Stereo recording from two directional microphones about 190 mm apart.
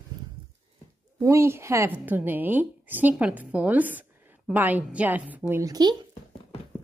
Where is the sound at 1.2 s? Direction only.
15° right (ahead or behind).